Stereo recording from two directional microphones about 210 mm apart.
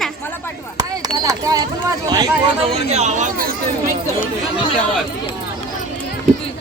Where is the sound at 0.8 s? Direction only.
20° right (ahead or behind).